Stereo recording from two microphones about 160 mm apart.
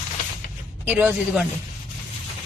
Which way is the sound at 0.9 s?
10° right (ahead or behind).